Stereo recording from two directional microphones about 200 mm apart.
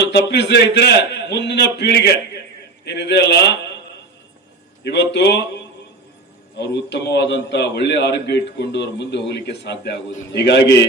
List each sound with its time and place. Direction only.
0.3 s a man's voice: 55° left (ahead or behind)
4.8 s a man's voice: 60° left (ahead or behind)